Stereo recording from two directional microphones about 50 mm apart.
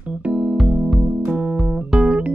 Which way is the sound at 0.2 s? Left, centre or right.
Right.